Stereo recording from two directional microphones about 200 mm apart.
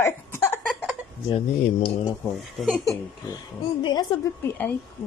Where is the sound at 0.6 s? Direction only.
Centre (ahead or behind).